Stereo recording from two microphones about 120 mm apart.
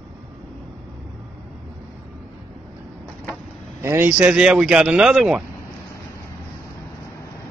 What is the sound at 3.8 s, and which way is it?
Speech, 20° right (ahead or behind).